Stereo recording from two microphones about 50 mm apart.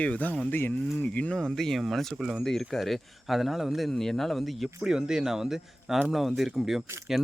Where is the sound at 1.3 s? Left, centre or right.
Centre.